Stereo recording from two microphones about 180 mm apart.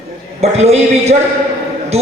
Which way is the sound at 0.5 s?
35° right (ahead or behind).